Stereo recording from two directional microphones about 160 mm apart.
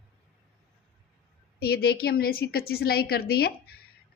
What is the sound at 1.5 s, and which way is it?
A woman's voice, 75° left (ahead or behind).